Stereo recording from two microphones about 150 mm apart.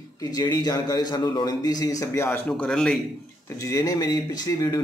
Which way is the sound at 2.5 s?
5° left (ahead or behind).